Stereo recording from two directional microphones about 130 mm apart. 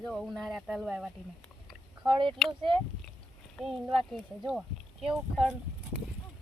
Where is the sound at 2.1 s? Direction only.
40° right (ahead or behind).